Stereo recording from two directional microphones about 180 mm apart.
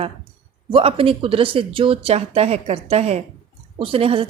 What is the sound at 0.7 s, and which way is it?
A woman's voice, 30° right (ahead or behind).